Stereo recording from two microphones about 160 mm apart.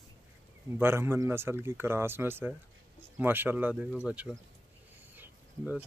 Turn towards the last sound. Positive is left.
turn(degrees=-10)  # may be behind; listen again after turning